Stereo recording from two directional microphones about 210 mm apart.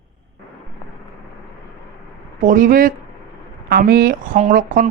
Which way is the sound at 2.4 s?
40° right (ahead or behind).